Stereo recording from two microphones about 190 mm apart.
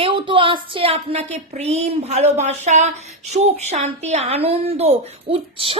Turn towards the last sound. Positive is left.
turn(degrees=-30)  # may be behind; listen again after turning